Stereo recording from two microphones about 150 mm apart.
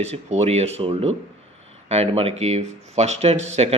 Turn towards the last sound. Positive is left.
turn(degrees=-45)  # may be behind; listen again after turning